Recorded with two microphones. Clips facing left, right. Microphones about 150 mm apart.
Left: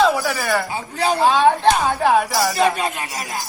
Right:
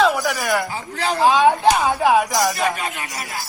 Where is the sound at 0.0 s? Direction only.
Centre (ahead or behind).